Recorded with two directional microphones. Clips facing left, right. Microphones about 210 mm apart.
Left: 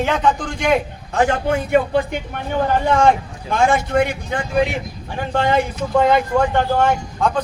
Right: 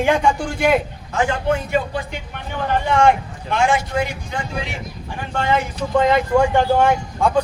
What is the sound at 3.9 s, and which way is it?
Speech, 60° left (ahead or behind).